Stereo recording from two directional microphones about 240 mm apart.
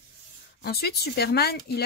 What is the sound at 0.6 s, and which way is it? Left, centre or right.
Speech, left.